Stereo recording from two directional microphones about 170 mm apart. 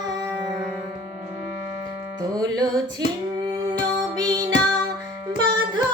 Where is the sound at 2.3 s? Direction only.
20° right (ahead or behind).